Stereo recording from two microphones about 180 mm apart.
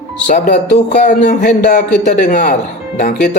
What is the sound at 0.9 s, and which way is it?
Speech, 45° left (ahead or behind).